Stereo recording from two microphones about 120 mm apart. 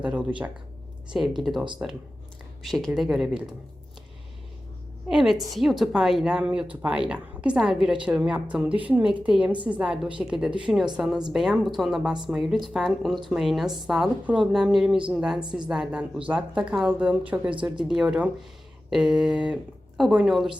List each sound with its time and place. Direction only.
0.0 s speech: 10° right (ahead or behind)
1.4 s a woman's voice: centre (ahead or behind)
2.6 s a woman's voice: centre (ahead or behind)
5.0 s a woman's voice: 5° right (ahead or behind)
17.5 s speech: 40° right (ahead or behind)
17.8 s a woman's voice: 5° right (ahead or behind)